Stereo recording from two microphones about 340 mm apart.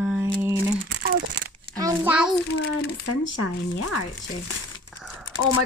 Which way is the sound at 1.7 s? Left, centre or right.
Centre.